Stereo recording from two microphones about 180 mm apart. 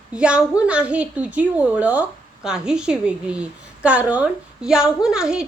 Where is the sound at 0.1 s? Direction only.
5° right (ahead or behind).